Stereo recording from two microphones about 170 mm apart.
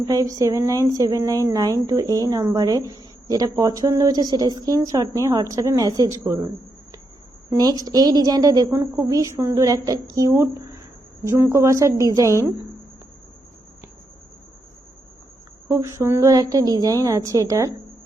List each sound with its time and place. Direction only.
0.1 s speech: 20° right (ahead or behind)
7.6 s a woman's voice: 20° right (ahead or behind)
15.7 s speech: 15° right (ahead or behind)